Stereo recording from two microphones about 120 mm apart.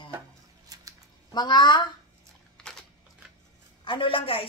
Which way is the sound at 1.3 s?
40° left (ahead or behind).